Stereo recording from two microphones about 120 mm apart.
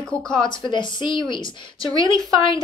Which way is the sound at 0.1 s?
55° left (ahead or behind).